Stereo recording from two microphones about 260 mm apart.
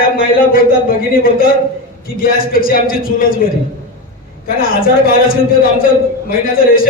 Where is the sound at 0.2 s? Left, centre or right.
Left.